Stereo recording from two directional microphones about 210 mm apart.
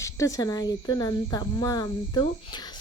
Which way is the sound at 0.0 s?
15° left (ahead or behind).